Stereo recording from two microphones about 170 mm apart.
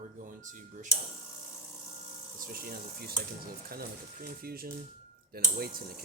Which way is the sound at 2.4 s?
60° right (ahead or behind).